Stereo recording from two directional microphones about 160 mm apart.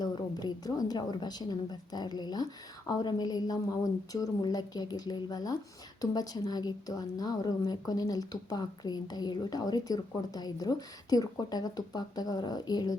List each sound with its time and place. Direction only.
0.0 s a woman's voice: 25° left (ahead or behind)